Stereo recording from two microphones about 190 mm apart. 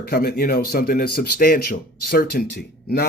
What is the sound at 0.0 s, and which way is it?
A man's voice, 55° left (ahead or behind).